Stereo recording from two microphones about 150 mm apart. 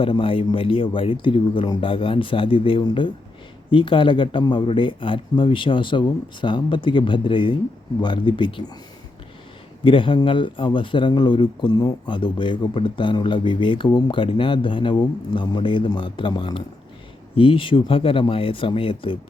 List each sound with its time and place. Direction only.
0.0 s a man's voice: 35° left (ahead or behind)
9.8 s a man's voice: 35° left (ahead or behind)